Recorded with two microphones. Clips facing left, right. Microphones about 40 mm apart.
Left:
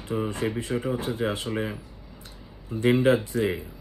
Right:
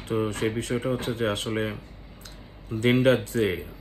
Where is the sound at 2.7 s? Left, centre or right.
Right.